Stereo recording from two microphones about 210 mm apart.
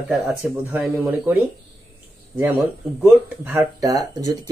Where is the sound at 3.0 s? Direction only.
10° right (ahead or behind).